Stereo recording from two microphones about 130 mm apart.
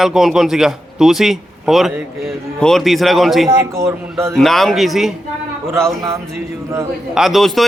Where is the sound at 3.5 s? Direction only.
20° right (ahead or behind).